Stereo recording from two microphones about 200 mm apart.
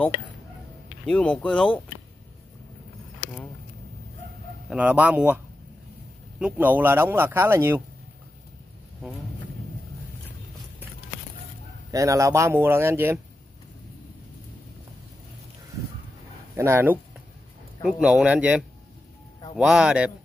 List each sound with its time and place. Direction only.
1.0 s speech: 5° left (ahead or behind)
4.6 s speech: 5° right (ahead or behind)
6.4 s speech: 10° right (ahead or behind)
11.9 s speech: 15° right (ahead or behind)
16.5 s speech: 15° right (ahead or behind)